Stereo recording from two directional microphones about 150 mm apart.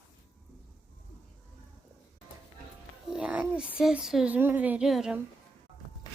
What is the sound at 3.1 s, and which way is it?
A child's voice, 10° right (ahead or behind).